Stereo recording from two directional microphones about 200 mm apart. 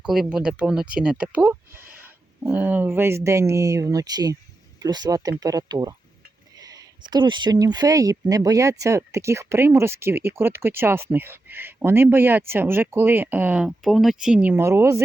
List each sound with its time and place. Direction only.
0.1 s speech: 5° right (ahead or behind)